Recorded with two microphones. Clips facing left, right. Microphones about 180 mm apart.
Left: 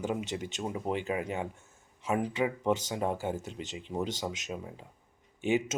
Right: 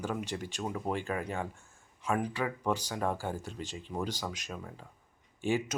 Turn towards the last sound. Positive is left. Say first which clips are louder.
# left 2 dB
turn(degrees=20)  # may be behind; listen again after turning